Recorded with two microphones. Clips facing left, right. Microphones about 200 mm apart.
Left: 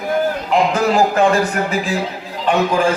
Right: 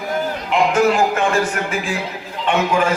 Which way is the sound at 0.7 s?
35° left (ahead or behind).